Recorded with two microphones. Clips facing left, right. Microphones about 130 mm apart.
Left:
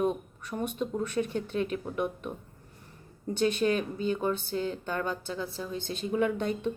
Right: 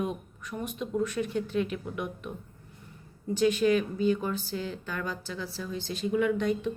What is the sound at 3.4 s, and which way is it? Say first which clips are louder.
Speech: right 2 dB; 35° left (ahead or behind).